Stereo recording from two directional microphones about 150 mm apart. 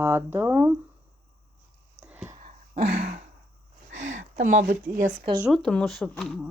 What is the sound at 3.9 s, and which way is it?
Speech, 55° right (ahead or behind).